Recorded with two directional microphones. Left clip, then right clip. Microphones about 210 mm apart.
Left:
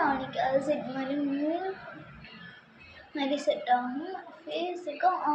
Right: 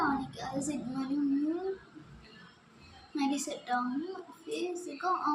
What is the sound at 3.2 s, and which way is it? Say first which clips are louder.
A child's voice: left 6 dB; 30° right (ahead or behind).